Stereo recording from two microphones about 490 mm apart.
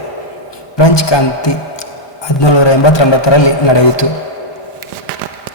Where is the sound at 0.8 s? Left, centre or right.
Left.